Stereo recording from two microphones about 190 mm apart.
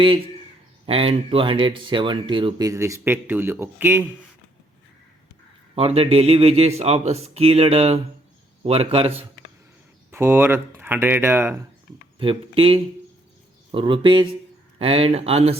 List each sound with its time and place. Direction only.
0.9 s speech: 30° right (ahead or behind); by 4.0 s 10° right (ahead or behind)
5.7 s a man's voice: 30° right (ahead or behind)
10.1 s speech: 10° right (ahead or behind)
12.2 s a man's voice: 25° right (ahead or behind)